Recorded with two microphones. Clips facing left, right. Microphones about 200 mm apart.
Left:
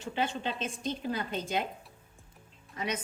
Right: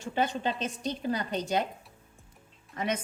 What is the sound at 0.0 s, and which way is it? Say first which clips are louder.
Speech: right 3 dB; 45° right (ahead or behind).